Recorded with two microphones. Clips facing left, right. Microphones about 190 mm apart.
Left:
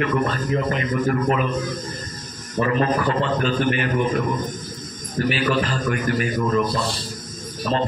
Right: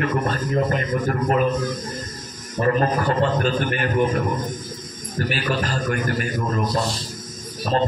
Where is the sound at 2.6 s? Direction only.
45° right (ahead or behind).